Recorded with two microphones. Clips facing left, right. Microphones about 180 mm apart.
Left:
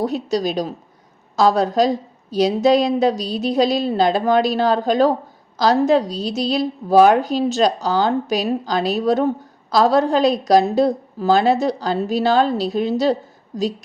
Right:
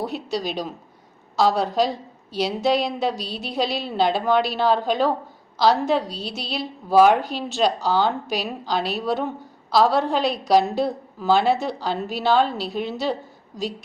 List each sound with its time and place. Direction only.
0.0 s a woman's voice: 40° left (ahead or behind)